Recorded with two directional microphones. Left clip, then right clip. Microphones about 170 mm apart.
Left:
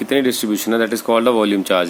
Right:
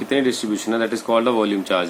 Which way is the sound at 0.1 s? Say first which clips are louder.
Left 3 dB; 50° left (ahead or behind).